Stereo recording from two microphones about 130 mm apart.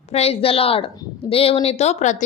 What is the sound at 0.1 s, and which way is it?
A woman's voice, 50° left (ahead or behind).